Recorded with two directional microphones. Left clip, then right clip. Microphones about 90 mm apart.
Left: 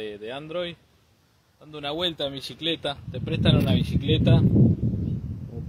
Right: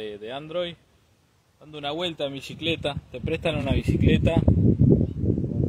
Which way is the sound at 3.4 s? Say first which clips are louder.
Left 5 dB; 55° right (ahead or behind).